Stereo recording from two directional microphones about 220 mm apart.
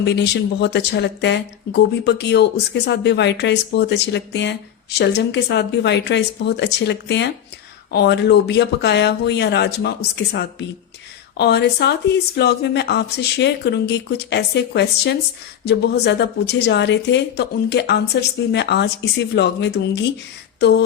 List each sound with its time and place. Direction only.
0.0 s speech: 50° left (ahead or behind)